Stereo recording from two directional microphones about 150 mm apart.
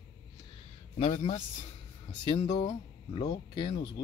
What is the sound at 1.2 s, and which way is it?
Speech, 40° left (ahead or behind).